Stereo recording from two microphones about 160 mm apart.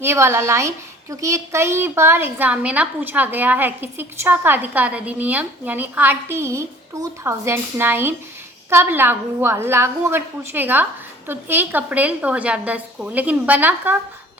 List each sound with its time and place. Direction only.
0.0 s a woman's voice: 15° right (ahead or behind)